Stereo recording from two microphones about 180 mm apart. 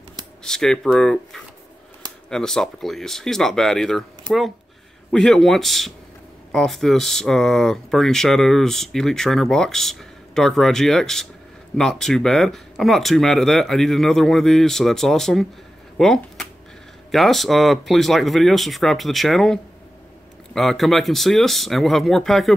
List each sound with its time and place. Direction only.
0.4 s speech: 5° left (ahead or behind)